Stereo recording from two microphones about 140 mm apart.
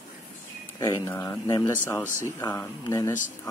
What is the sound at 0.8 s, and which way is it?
Speech, 20° left (ahead or behind).